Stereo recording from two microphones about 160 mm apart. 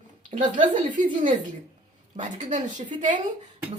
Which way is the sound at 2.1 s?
50° right (ahead or behind).